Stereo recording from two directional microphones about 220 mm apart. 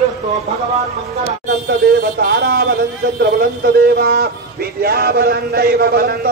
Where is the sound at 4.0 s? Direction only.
45° right (ahead or behind).